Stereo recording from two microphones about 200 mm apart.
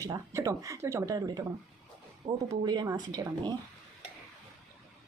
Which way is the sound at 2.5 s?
20° right (ahead or behind).